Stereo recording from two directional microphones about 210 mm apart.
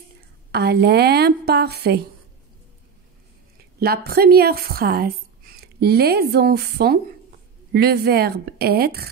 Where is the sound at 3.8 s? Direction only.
45° right (ahead or behind).